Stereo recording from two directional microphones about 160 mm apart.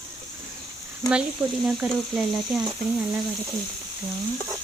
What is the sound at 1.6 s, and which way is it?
Speech, 5° right (ahead or behind).